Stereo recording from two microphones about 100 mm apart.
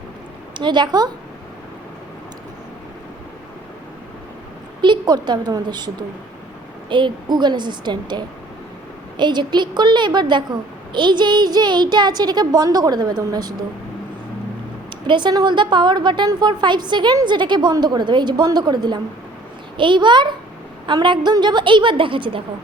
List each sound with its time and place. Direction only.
0.5 s a woman's voice: 50° right (ahead or behind)
4.8 s a woman's voice: 45° right (ahead or behind)
15.0 s a woman's voice: 50° right (ahead or behind)